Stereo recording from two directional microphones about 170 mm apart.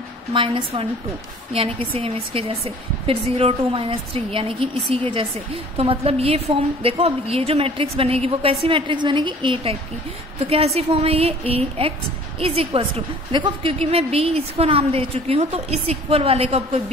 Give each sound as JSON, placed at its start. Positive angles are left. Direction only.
{"t": 0.3, "sound": "a woman's voice", "side_deg": -30}